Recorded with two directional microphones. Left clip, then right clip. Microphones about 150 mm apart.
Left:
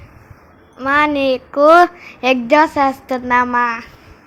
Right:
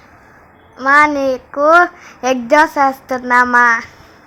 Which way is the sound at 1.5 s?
20° left (ahead or behind).